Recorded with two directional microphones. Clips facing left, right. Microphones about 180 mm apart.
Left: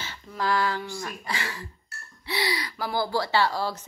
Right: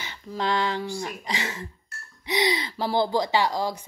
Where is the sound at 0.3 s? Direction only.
20° right (ahead or behind).